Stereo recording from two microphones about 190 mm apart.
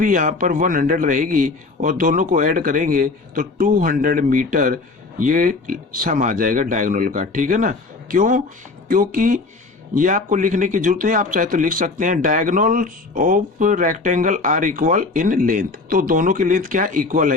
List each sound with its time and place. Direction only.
0.0 s a man's voice: 45° right (ahead or behind)